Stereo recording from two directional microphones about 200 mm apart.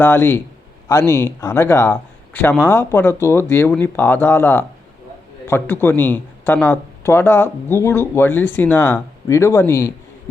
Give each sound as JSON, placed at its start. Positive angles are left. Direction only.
{"t": 0.0, "sound": "speech", "side_deg": 10}